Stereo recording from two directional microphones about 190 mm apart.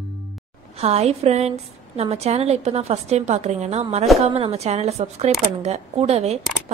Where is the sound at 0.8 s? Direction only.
35° right (ahead or behind).